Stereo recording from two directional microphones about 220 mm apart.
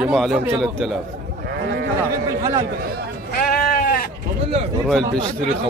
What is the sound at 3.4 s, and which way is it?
Sheep, 45° left (ahead or behind).